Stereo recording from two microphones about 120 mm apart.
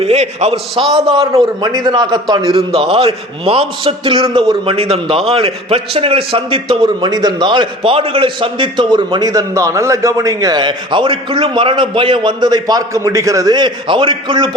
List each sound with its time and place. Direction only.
0.0 s a man's voice: 60° right (ahead or behind)
1.6 s a man's voice: 35° right (ahead or behind)
2.3 s a man's voice: 50° right (ahead or behind)